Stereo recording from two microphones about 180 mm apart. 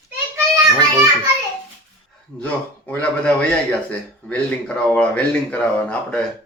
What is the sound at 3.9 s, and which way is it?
Speech, 5° left (ahead or behind).